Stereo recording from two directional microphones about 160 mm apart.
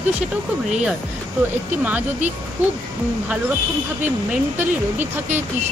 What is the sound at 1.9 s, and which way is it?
Speech, 10° right (ahead or behind).